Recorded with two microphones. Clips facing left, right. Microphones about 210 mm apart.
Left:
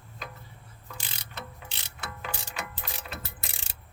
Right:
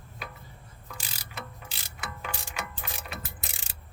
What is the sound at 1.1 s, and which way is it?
Mechanisms, 5° right (ahead or behind).